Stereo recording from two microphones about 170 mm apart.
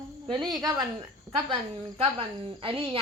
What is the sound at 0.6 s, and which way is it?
A woman's voice, 20° right (ahead or behind).